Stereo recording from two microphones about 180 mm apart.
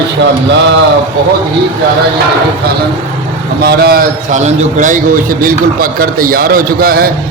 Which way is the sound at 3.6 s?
60° right (ahead or behind).